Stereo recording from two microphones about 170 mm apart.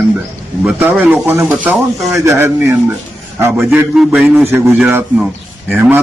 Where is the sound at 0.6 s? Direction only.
10° right (ahead or behind).